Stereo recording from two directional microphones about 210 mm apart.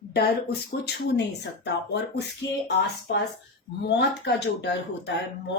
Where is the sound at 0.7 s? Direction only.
50° left (ahead or behind).